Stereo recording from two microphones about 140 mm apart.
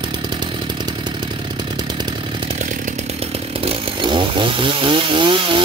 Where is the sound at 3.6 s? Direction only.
35° right (ahead or behind).